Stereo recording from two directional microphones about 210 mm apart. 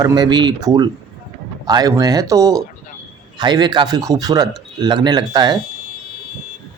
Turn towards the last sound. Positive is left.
turn(degrees=-20)  # may be behind; listen again after turning